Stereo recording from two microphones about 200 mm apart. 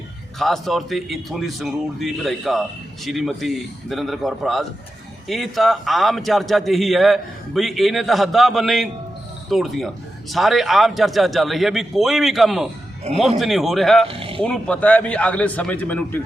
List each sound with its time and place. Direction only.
0.3 s a man's voice: centre (ahead or behind)
13.1 s speech: 30° right (ahead or behind)
13.4 s a man's voice: centre (ahead or behind)
14.1 s speech: 25° right (ahead or behind)
14.4 s a man's voice: 5° left (ahead or behind)